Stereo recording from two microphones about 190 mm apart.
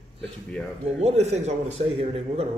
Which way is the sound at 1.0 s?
35° right (ahead or behind).